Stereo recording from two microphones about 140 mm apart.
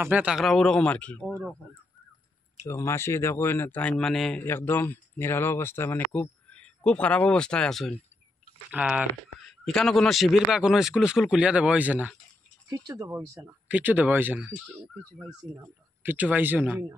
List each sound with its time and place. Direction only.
0.0 s speech: 10° right (ahead or behind); by 1.2 s 10° left (ahead or behind)
2.6 s speech: 20° left (ahead or behind); by 4.4 s 5° left (ahead or behind)
4.4 s speech: 15° left (ahead or behind)
8.7 s speech: 10° right (ahead or behind)
9.4 s speech: 5° left (ahead or behind)
12.6 s speech: 25° right (ahead or behind)
15.5 s speech: 15° right (ahead or behind)